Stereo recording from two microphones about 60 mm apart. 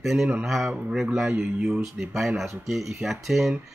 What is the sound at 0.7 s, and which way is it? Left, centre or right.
A man's voice, centre.